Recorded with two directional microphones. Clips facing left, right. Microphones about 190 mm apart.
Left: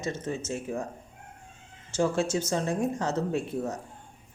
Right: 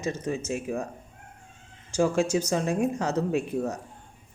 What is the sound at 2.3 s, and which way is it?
A woman's voice, 15° right (ahead or behind).